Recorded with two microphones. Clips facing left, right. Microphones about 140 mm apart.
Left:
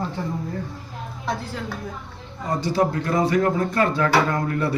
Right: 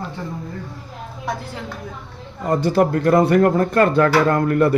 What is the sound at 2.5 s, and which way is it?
Speech, 55° right (ahead or behind).